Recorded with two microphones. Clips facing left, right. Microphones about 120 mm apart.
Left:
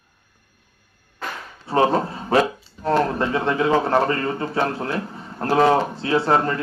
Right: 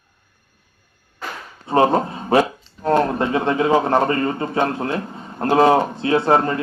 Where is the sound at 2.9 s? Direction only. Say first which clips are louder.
Right 2 dB; 15° right (ahead or behind).